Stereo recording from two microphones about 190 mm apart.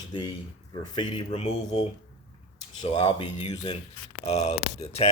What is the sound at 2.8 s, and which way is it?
Speech, 30° left (ahead or behind).